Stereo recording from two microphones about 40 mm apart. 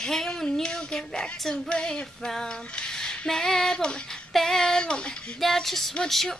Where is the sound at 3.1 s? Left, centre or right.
Centre.